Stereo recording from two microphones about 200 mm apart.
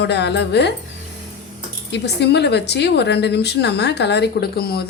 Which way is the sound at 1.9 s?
55° left (ahead or behind).